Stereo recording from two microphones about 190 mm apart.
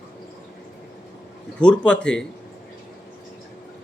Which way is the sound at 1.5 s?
5° left (ahead or behind).